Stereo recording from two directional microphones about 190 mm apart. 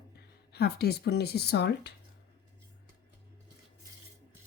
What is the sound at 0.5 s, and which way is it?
A woman's voice, 55° left (ahead or behind).